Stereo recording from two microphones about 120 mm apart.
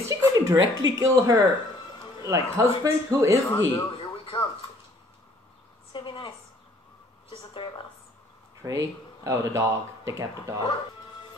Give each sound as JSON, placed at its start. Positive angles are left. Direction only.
{"t": 0.1, "sound": "speech", "side_deg": -25}
{"t": 3.5, "sound": "speech", "side_deg": 40}
{"t": 5.9, "sound": "a woman's voice", "side_deg": 45}
{"t": 8.6, "sound": "speech", "side_deg": -25}